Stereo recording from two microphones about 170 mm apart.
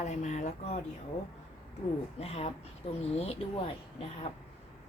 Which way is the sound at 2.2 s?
35° left (ahead or behind).